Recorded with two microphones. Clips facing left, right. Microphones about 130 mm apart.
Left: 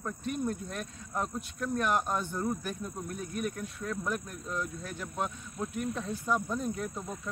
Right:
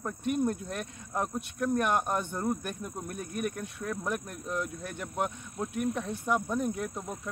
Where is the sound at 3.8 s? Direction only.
20° right (ahead or behind).